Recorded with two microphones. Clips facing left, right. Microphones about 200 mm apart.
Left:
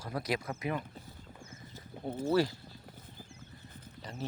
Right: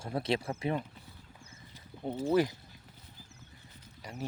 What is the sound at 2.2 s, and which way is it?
Speech, 15° right (ahead or behind).